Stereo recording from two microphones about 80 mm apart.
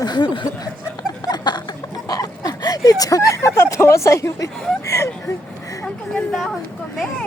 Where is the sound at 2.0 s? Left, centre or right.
Left.